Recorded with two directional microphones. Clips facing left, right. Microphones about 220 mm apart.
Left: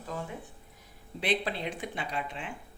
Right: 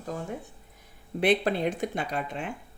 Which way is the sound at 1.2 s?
50° right (ahead or behind).